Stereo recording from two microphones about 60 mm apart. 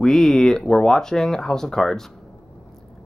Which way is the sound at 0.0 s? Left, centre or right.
Centre.